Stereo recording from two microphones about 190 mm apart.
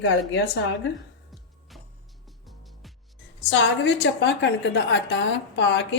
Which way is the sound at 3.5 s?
70° left (ahead or behind).